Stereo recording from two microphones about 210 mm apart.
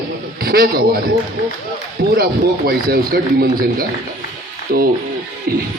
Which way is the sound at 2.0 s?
50° right (ahead or behind).